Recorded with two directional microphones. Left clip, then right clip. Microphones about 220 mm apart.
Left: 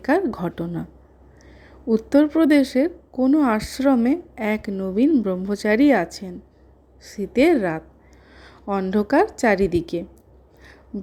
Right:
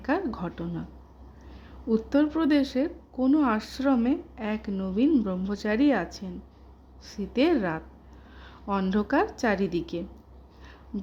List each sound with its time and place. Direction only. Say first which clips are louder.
0.0 s a woman's voice: left 8 dB; 20° left (ahead or behind)
1.9 s a woman's voice: left 7 dB; 20° left (ahead or behind)
10.9 s a sound: left 4 dB; 5° left (ahead or behind)